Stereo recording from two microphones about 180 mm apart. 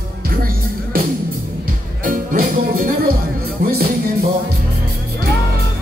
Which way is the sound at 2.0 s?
50° right (ahead or behind).